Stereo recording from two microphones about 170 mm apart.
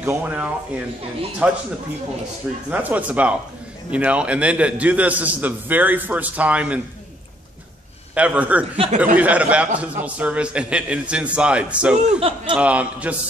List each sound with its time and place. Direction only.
0.0 s a man's voice: 10° right (ahead or behind)
2.7 s a man's voice: 10° right (ahead or behind)
8.1 s a man's voice: 10° right (ahead or behind)
8.7 s speech: 35° right (ahead or behind)
9.0 s a man's voice: 10° right (ahead or behind)
12.2 s chuckle: 35° right (ahead or behind)
12.5 s a man's voice: 10° right (ahead or behind)